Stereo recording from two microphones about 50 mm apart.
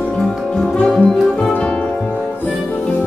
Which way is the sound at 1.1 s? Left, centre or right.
Centre.